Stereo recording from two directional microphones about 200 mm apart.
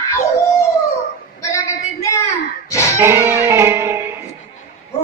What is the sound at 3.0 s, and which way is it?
Music, 10° right (ahead or behind).